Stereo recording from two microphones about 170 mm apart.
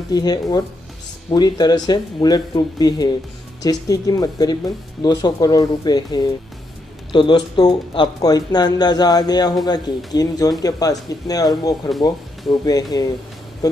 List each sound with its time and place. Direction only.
0.1 s speech: 25° left (ahead or behind)